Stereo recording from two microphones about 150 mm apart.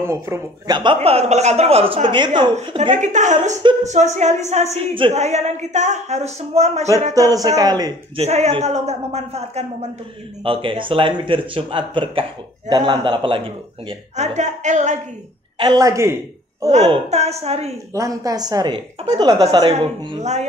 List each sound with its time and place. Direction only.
0.0 s speech: 20° right (ahead or behind)
0.7 s speech: 40° right (ahead or behind)
2.9 s speech: 50° right (ahead or behind)
4.7 s speech: 35° right (ahead or behind)
5.1 s speech: 50° right (ahead or behind)
7.2 s a woman's voice: 25° right (ahead or behind)
8.2 s speech: 45° right (ahead or behind)
15.6 s a woman's voice: 25° right (ahead or behind)
16.6 s speech: 45° right (ahead or behind)
17.9 s a woman's voice: 25° right (ahead or behind)
20.2 s speech: 50° right (ahead or behind)